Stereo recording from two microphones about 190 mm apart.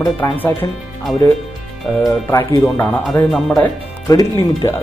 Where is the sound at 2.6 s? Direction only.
10° left (ahead or behind).